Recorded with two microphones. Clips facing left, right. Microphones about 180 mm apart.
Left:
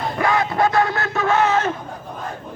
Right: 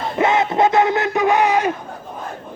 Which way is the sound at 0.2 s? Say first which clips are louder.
Right 3 dB; 20° right (ahead or behind).